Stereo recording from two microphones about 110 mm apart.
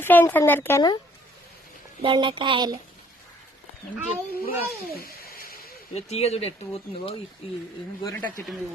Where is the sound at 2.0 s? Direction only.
50° right (ahead or behind).